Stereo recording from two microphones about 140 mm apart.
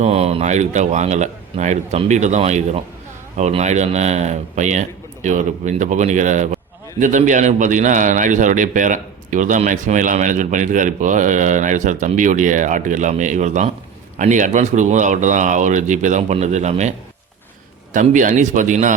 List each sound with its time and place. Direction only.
0.0 s a man's voice: 50° right (ahead or behind)
17.9 s a man's voice: 65° right (ahead or behind)